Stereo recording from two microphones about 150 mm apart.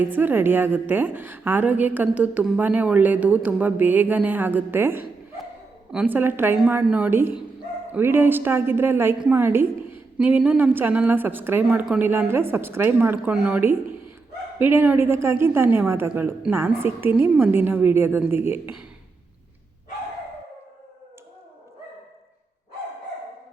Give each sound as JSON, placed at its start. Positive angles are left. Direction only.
{"t": 0.0, "sound": "a woman's voice", "side_deg": -15}